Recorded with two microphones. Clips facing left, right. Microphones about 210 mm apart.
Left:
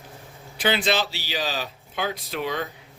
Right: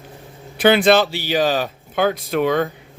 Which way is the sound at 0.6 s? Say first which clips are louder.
Right 10 dB; 55° right (ahead or behind).